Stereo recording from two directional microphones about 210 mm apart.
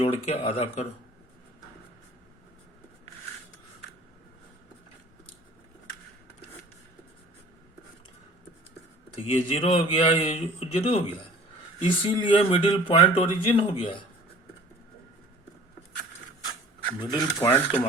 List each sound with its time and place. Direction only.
0.0 s speech: 30° left (ahead or behind)
9.1 s speech: 25° left (ahead or behind)
17.0 s speech: 20° left (ahead or behind)